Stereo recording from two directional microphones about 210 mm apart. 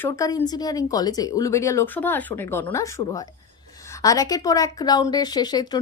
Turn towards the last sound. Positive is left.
turn(degrees=20)  # may be behind; listen again after turning